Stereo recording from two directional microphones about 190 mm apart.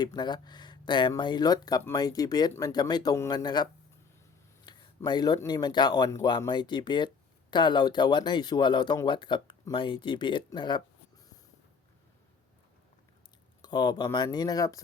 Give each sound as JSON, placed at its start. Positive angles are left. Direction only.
{"t": 0.0, "sound": "speech", "side_deg": 20}
{"t": 13.6, "sound": "speech", "side_deg": 20}